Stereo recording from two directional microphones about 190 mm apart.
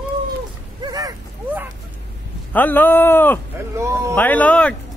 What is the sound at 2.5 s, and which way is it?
Speech, 10° left (ahead or behind).